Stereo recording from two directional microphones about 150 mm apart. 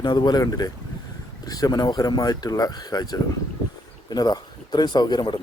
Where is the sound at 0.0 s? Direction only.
30° left (ahead or behind).